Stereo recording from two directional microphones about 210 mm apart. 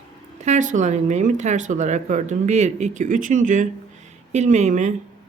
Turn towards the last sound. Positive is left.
turn(degrees=-35)  # may be behind; listen again after turning